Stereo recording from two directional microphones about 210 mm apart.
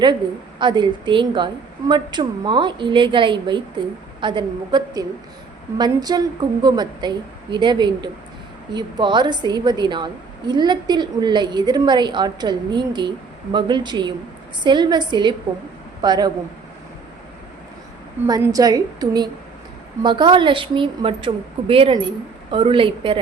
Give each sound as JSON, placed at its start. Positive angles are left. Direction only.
{"t": 0.6, "sound": "a woman's voice", "side_deg": -20}
{"t": 18.3, "sound": "a woman's voice", "side_deg": -15}